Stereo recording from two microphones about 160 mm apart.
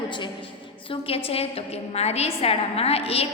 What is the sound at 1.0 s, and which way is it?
A woman's voice, 35° left (ahead or behind).